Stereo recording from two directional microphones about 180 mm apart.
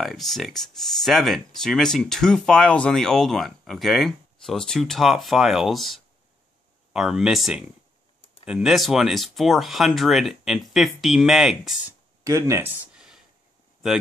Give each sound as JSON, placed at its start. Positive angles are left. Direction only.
{"t": 0.0, "sound": "speech", "side_deg": 0}
{"t": 12.2, "sound": "speech", "side_deg": -15}
{"t": 12.9, "sound": "a sound", "side_deg": -5}